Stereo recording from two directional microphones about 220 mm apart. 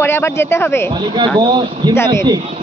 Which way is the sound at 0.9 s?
20° right (ahead or behind).